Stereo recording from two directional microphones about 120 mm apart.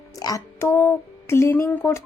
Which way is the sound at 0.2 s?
30° left (ahead or behind).